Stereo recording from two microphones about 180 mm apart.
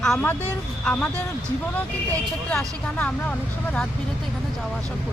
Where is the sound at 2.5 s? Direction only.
5° left (ahead or behind).